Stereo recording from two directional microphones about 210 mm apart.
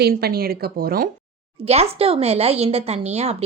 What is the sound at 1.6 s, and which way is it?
Speech, 30° right (ahead or behind).